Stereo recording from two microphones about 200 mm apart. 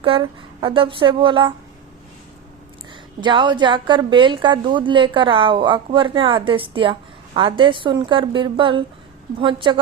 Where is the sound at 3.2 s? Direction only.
25° right (ahead or behind).